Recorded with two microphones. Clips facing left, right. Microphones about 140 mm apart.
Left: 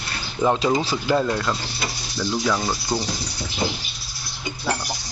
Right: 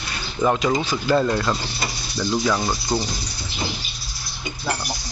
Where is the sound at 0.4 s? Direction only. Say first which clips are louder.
Even; 25° left (ahead or behind).